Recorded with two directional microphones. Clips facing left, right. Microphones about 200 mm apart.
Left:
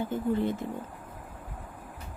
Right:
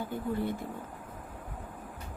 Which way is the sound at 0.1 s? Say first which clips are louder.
Left 3 dB; 20° left (ahead or behind).